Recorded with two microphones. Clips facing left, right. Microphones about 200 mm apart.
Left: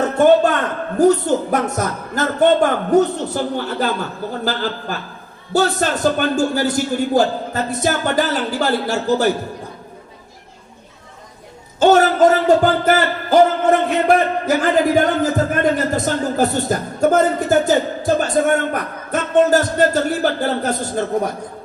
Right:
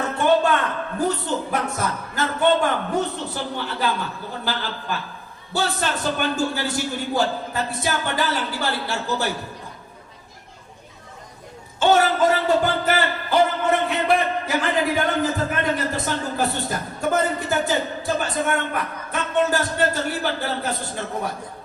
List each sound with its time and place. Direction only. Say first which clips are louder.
0.9 s a man's voice: left 11 dB; 45° left (ahead or behind)
5.5 s a man's voice: left 7 dB; 45° left (ahead or behind)
11.8 s a sound: left 6 dB; 45° left (ahead or behind)